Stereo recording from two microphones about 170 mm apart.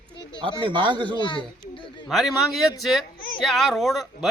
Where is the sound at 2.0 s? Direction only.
Centre (ahead or behind).